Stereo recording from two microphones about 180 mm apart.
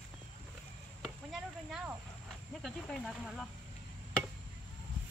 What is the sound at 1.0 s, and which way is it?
Chop, centre (ahead or behind).